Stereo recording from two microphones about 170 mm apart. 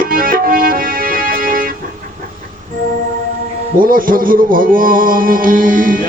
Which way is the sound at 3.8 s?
55° right (ahead or behind).